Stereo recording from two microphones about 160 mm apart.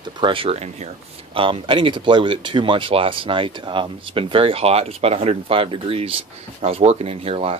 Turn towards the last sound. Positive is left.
turn(degrees=-40)  # may be behind; listen again after turning